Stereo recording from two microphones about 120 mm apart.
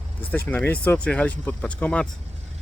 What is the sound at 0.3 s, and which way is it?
Speech, 15° left (ahead or behind).